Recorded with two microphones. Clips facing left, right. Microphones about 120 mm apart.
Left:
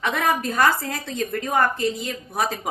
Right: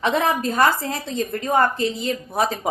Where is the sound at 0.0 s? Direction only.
25° right (ahead or behind).